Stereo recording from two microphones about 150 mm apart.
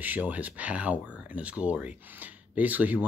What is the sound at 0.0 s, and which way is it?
Speech, 10° right (ahead or behind).